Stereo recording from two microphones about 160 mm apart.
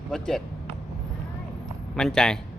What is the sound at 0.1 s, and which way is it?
Speech, 5° left (ahead or behind).